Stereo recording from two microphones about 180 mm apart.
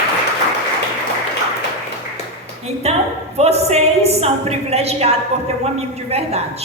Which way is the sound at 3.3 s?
35° right (ahead or behind).